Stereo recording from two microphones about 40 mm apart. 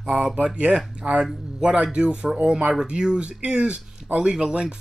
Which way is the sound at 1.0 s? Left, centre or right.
Right.